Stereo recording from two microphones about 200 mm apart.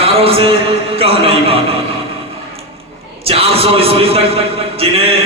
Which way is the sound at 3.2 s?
30° right (ahead or behind).